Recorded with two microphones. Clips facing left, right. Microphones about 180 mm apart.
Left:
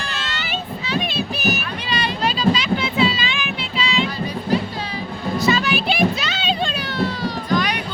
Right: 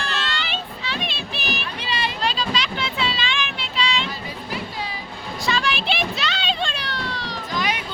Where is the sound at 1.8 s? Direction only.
25° right (ahead or behind).